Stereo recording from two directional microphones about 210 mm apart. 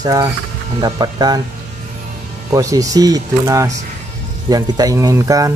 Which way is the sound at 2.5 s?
15° right (ahead or behind).